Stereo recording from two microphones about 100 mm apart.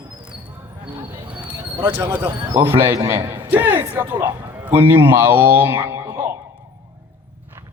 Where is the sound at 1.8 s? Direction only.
20° right (ahead or behind).